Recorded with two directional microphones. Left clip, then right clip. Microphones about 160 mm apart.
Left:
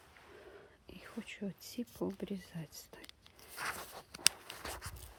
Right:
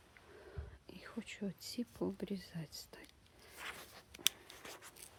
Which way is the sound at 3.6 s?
50° left (ahead or behind).